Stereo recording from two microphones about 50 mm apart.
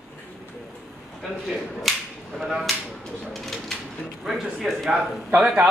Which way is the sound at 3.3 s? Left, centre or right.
Centre.